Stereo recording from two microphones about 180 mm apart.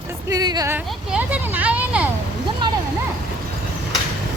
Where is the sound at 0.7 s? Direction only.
10° right (ahead or behind).